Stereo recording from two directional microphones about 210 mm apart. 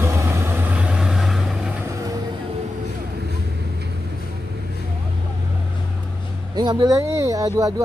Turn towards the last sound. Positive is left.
turn(degrees=-15)  # may be behind; listen again after turning